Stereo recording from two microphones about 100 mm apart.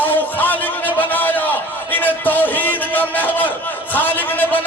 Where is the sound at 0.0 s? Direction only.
20° left (ahead or behind).